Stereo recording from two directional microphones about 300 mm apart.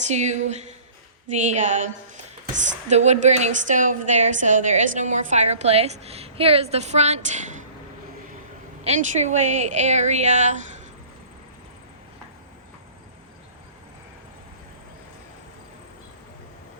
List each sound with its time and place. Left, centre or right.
0.0 s a woman's voice: right
8.8 s a woman's voice: right